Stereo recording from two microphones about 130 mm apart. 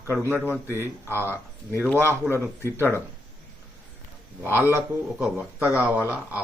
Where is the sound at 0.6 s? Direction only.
20° right (ahead or behind).